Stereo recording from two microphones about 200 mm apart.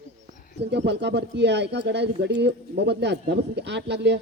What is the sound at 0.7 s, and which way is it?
Speech, 60° right (ahead or behind).